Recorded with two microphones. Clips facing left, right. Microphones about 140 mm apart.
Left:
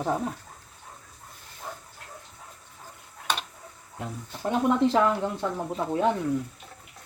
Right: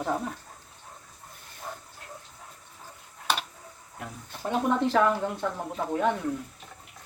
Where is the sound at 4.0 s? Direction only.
25° left (ahead or behind).